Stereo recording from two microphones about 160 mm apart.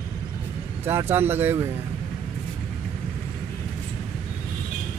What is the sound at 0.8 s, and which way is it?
Speech, 15° right (ahead or behind).